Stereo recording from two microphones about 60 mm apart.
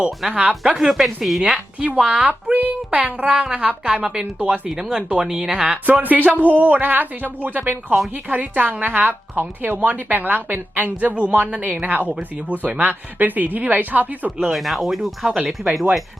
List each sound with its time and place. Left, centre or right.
0.3 s a woman's voice: centre
0.6 s speech: centre
2.0 s a woman's voice: centre
4.7 s speech: centre
5.8 s a woman's voice: right
14.5 s speech: centre